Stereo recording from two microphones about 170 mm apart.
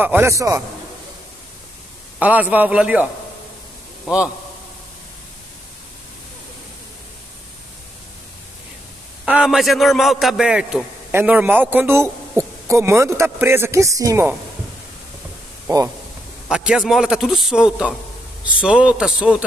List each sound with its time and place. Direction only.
0.0 s a man's voice: 15° right (ahead or behind)
2.1 s a man's voice: 10° right (ahead or behind)
9.2 s a man's voice: 5° right (ahead or behind)
15.6 s speech: 20° right (ahead or behind)
16.4 s a man's voice: 5° right (ahead or behind)